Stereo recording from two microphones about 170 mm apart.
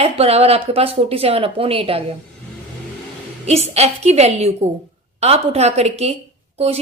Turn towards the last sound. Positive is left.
turn(degrees=-40)  # may be behind; listen again after turning